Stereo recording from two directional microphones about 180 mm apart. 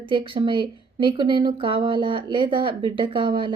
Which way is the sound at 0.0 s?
30° right (ahead or behind).